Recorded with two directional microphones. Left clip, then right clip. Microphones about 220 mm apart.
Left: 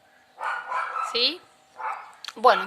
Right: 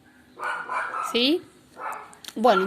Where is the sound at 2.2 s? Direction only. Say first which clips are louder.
Left 1 dB; 15° left (ahead or behind).